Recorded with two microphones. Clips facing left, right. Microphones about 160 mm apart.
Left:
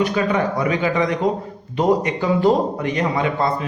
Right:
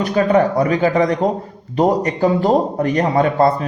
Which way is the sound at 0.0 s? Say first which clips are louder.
Right 5 dB; 40° right (ahead or behind).